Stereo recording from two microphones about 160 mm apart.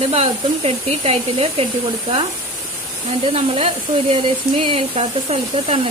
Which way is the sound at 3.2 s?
35° right (ahead or behind).